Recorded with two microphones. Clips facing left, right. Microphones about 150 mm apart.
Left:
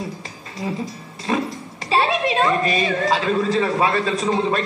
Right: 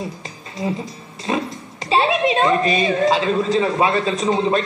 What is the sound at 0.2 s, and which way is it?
Music, 25° right (ahead or behind).